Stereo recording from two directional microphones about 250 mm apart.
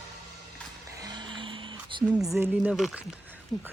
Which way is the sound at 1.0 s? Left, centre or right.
Centre.